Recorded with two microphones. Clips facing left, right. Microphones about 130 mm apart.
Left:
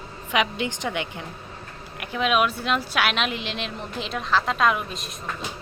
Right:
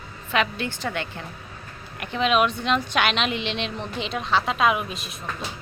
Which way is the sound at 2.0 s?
5° left (ahead or behind).